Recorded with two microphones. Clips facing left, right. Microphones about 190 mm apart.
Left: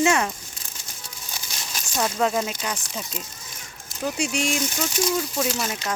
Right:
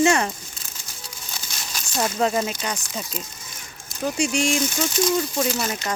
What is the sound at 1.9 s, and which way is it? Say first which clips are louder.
Speech: right 1 dB; centre (ahead or behind).